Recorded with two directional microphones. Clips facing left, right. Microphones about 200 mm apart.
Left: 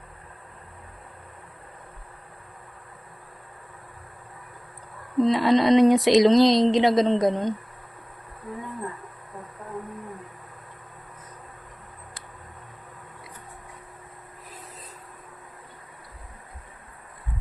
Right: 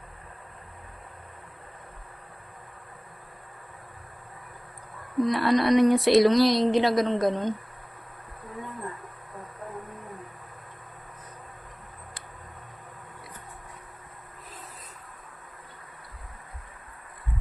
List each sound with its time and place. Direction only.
5.2 s speech: 20° left (ahead or behind)